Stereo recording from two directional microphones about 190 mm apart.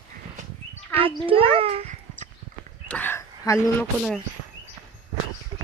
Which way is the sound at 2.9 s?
10° left (ahead or behind).